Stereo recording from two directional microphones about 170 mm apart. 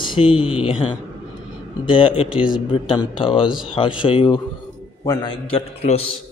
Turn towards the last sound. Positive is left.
turn(degrees=35)  # may be behind; listen again after turning